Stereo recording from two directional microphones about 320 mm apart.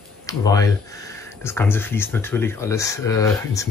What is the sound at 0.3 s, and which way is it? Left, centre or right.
Speech, centre.